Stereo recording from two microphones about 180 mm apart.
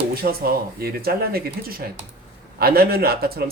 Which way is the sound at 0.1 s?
55° right (ahead or behind).